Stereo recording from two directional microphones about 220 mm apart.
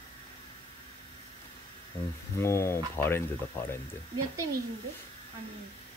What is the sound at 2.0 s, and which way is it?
Speech, 20° left (ahead or behind).